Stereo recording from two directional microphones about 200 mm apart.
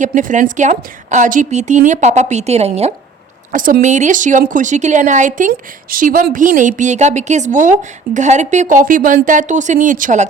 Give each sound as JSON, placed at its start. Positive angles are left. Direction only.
{"t": 0.0, "sound": "a woman's voice", "side_deg": -40}
{"t": 3.5, "sound": "a woman's voice", "side_deg": -40}